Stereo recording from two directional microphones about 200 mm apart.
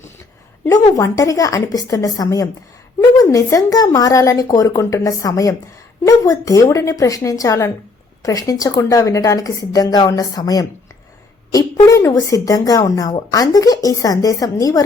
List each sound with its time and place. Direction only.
0.6 s a woman's voice: 15° left (ahead or behind)